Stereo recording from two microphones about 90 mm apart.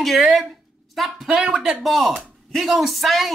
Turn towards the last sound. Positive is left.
turn(degrees=0)  # may be behind; listen again after turning